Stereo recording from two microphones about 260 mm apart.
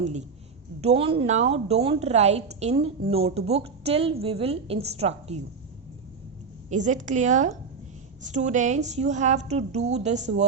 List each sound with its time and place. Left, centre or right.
0.0 s a woman's voice: right
6.7 s a woman's voice: right